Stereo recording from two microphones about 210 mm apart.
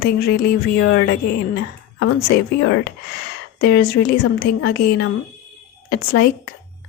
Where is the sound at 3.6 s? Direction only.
55° left (ahead or behind).